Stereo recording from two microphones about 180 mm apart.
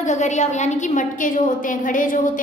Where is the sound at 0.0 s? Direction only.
40° left (ahead or behind).